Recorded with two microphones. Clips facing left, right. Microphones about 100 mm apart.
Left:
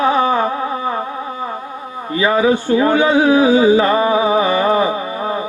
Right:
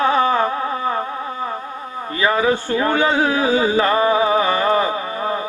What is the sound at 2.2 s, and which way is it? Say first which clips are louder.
Music: left 3 dB; 15° left (ahead or behind).